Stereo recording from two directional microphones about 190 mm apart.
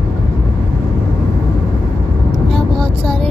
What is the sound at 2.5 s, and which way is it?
Vehicle, 5° left (ahead or behind).